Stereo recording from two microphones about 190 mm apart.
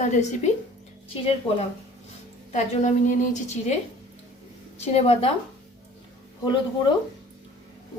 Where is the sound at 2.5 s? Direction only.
40° left (ahead or behind).